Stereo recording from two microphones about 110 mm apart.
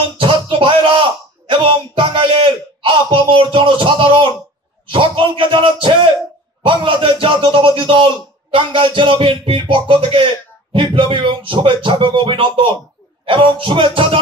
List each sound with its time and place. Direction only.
0.0 s music: 50° right (ahead or behind)
1.5 s speech: 50° right (ahead or behind)